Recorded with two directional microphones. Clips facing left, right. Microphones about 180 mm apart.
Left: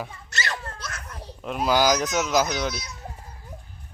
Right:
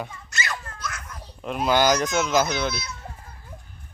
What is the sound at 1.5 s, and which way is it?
Speech, centre (ahead or behind).